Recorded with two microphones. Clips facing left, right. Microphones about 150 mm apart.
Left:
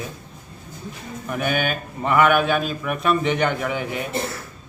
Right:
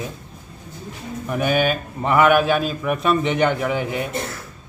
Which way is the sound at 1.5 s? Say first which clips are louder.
Right 5 dB; 35° right (ahead or behind).